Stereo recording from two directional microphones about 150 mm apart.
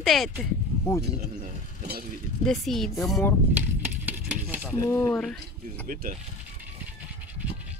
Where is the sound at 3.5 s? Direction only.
10° right (ahead or behind).